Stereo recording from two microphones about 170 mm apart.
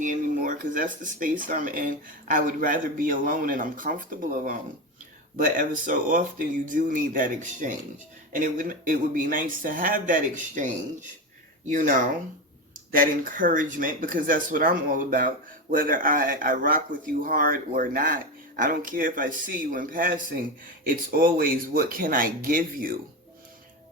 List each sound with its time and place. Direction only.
0.0 s speech: 50° right (ahead or behind)